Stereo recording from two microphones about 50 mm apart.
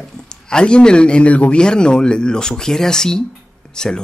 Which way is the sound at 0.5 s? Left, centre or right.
Centre.